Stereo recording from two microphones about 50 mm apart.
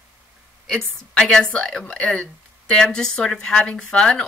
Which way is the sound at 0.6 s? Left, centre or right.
Centre.